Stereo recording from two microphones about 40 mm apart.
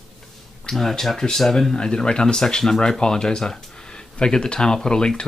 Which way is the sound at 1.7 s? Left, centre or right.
Left.